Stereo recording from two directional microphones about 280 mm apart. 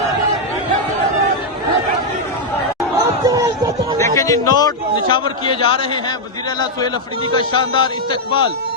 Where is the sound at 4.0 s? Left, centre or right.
Centre.